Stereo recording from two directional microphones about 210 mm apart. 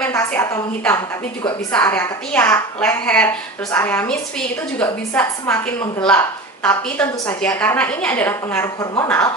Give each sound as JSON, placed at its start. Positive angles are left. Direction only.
{"t": 0.0, "sound": "a woman's voice", "side_deg": 10}